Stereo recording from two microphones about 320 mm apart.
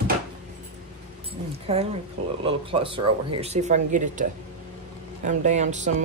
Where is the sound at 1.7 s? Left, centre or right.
Centre.